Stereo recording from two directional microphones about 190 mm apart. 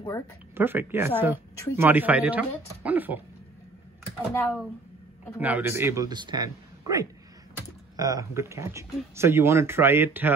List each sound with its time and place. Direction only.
0.6 s speech: 10° right (ahead or behind)
4.3 s speech: 10° left (ahead or behind)
5.4 s speech: 10° right (ahead or behind)